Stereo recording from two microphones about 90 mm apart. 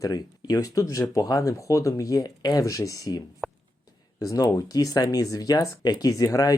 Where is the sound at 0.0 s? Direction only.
45° left (ahead or behind).